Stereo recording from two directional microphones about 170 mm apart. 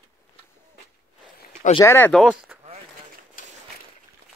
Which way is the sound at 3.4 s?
55° left (ahead or behind).